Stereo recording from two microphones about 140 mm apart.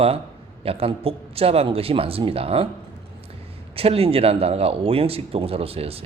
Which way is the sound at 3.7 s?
45° right (ahead or behind).